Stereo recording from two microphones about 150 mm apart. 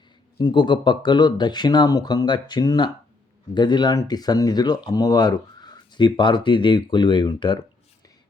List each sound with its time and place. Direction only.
0.3 s speech: 30° left (ahead or behind)